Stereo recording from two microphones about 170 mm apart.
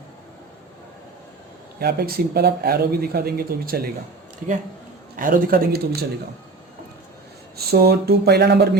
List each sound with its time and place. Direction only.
1.8 s speech: 65° right (ahead or behind)
5.1 s speech: 55° right (ahead or behind)
7.5 s speech: 70° right (ahead or behind)